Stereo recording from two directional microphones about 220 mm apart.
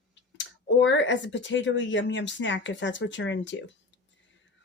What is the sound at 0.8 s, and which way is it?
Speech, 55° left (ahead or behind).